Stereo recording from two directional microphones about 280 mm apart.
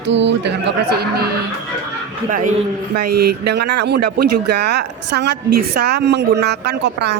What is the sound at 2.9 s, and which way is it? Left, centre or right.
A woman's voice, right.